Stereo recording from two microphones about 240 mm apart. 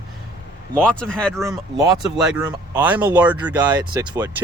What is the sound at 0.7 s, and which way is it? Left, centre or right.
Speech, centre.